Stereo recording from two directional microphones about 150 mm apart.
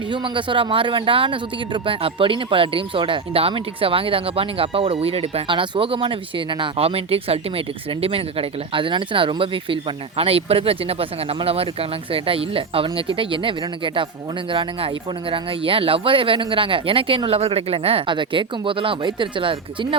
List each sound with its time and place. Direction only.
0.1 s speech: 35° right (ahead or behind)